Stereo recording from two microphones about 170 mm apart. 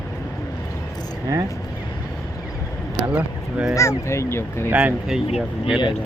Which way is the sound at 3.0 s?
5° right (ahead or behind).